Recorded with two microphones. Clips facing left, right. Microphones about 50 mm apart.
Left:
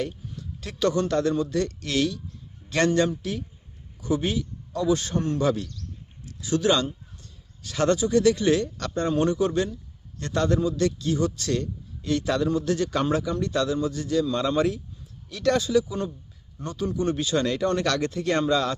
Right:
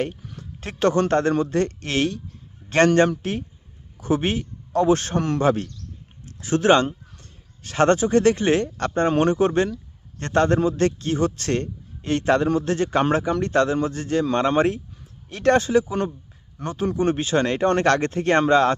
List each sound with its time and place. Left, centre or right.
0.0 s a sound: right
0.6 s a man's voice: right
5.4 s a man's voice: right